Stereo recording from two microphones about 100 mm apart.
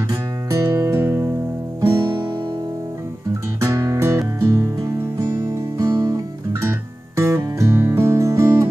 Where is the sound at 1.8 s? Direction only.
40° right (ahead or behind).